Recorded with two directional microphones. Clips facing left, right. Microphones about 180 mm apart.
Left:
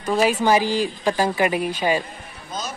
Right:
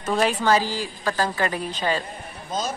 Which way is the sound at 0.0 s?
5° left (ahead or behind).